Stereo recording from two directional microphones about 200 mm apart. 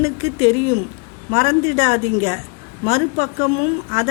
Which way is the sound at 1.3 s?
35° left (ahead or behind).